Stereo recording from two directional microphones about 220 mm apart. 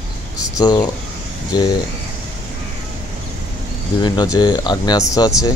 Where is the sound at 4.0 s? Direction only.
20° left (ahead or behind).